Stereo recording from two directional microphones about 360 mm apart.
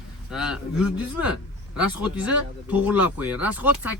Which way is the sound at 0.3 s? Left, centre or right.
Centre.